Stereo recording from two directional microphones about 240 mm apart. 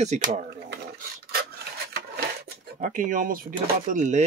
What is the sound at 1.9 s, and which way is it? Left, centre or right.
Dishes, right.